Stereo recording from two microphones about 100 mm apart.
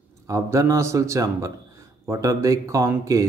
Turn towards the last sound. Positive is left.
turn(degrees=-30)  # may be behind; listen again after turning